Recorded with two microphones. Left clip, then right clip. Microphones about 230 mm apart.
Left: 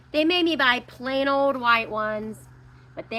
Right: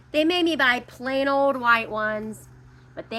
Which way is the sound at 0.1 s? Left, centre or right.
Centre.